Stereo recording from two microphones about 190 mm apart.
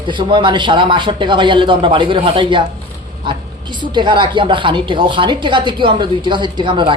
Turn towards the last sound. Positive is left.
turn(degrees=-25)  # may be behind; listen again after turning